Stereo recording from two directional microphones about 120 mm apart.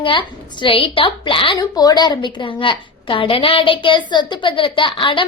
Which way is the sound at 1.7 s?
35° left (ahead or behind).